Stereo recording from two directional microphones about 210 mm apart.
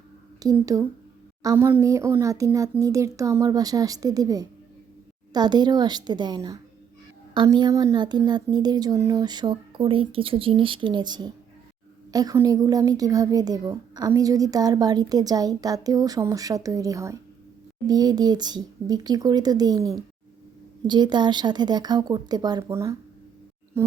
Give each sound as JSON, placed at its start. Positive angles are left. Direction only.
{"t": 0.4, "sound": "a child's voice", "side_deg": -15}